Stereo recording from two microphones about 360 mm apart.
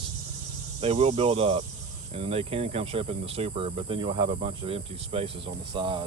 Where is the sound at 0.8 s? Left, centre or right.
Centre.